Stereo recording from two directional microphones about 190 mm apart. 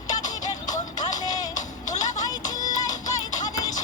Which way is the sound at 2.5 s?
20° left (ahead or behind).